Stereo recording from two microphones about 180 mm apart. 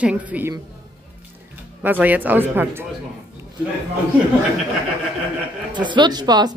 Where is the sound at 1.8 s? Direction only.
10° right (ahead or behind).